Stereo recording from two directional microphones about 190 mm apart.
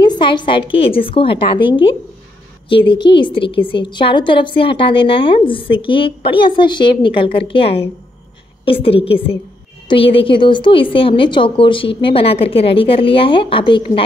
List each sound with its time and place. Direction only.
0.0 s a woman's voice: 25° left (ahead or behind)
8.8 s a woman's voice: 30° left (ahead or behind)